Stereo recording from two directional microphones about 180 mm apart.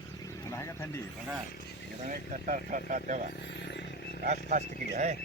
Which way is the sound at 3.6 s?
75° left (ahead or behind).